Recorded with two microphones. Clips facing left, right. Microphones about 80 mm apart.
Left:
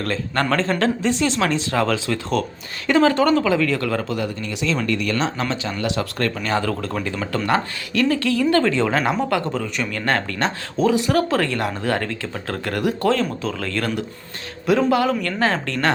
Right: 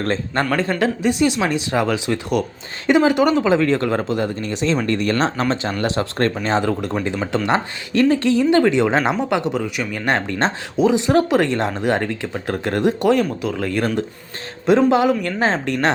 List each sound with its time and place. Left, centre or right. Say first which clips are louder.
0.0 s speech: right 2 dB; right
0.5 s speech: even; centre